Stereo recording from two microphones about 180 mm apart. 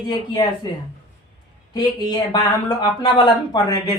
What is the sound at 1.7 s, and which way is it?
A man's voice, 20° left (ahead or behind).